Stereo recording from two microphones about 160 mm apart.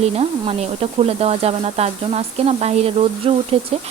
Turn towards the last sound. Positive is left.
turn(degrees=-35)  # may be behind; listen again after turning